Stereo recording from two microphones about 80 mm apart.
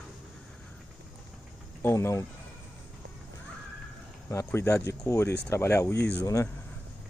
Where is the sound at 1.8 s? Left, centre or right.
Left.